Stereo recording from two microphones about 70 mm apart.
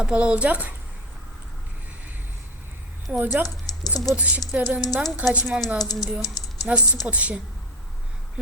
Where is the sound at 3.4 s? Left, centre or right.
Left.